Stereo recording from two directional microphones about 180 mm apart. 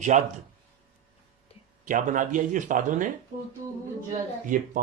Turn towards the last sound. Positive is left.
turn(degrees=-45)  # may be behind; listen again after turning